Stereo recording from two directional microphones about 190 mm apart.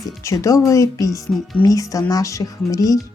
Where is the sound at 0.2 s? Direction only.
15° left (ahead or behind).